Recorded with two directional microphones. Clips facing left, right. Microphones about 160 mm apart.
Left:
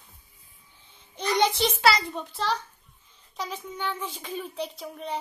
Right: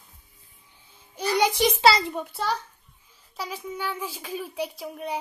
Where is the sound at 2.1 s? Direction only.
10° right (ahead or behind).